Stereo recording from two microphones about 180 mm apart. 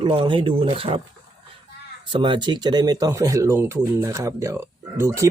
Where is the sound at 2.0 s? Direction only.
25° right (ahead or behind).